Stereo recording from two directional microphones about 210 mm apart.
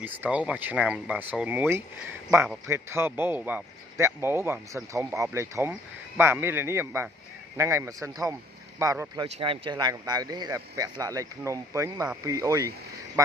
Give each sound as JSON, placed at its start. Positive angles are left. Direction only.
{"t": 0.0, "sound": "a man's voice", "side_deg": -5}